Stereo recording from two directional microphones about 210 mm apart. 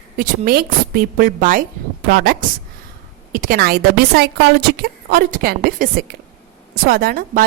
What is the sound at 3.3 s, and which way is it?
A woman's voice, 45° right (ahead or behind).